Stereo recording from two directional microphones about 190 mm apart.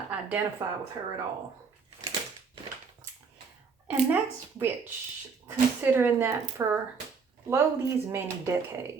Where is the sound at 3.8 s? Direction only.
10° right (ahead or behind).